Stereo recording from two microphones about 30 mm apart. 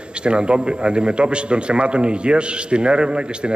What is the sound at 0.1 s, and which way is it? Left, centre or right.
A man's voice, right.